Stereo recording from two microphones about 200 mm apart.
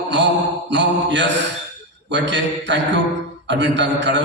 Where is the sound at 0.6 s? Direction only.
60° right (ahead or behind).